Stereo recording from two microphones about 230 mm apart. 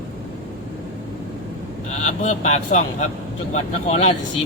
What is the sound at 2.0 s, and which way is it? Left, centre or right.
Speech, left.